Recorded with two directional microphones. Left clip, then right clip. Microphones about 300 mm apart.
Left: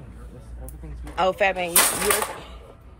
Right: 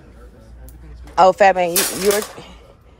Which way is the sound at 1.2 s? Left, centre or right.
Right.